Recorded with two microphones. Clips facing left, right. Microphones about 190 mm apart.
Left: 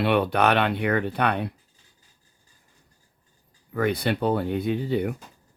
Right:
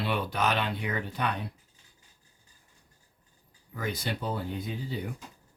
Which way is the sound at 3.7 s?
60° left (ahead or behind).